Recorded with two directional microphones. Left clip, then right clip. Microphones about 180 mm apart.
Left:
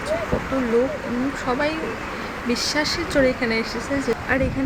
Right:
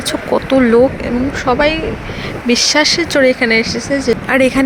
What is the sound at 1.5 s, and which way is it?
Speech, 35° right (ahead or behind).